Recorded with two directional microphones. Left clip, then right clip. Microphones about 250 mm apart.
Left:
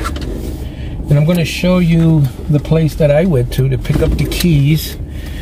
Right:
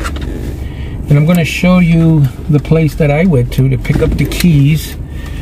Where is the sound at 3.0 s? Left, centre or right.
Centre.